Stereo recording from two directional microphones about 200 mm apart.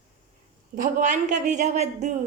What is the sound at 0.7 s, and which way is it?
A woman's voice, 40° right (ahead or behind).